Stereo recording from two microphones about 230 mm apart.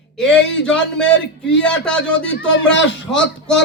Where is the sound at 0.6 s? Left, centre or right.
Centre.